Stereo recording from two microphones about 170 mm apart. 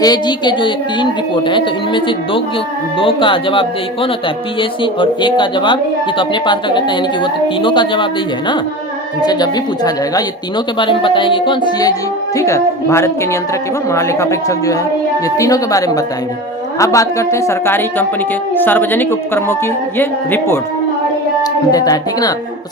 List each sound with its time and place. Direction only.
0.0 s a woman's voice: 25° left (ahead or behind)
9.2 s a woman's voice: 25° left (ahead or behind)